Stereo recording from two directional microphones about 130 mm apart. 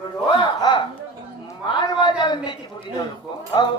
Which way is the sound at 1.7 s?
35° left (ahead or behind).